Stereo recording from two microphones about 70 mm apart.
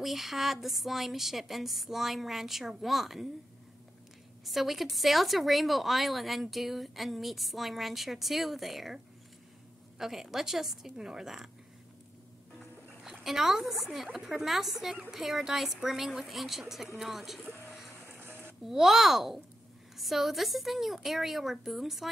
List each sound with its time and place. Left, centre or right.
0.0 s a woman's voice: centre
4.5 s a woman's voice: centre
13.0 s a woman's voice: centre
18.2 s a sound: right
18.6 s a woman's voice: centre